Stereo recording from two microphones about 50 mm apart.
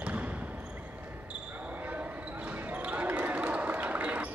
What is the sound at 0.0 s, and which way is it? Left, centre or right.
Basketball bounce, right.